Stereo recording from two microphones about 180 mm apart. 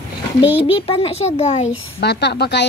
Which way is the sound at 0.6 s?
30° left (ahead or behind).